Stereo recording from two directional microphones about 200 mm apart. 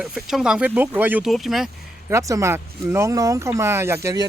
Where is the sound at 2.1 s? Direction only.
15° right (ahead or behind).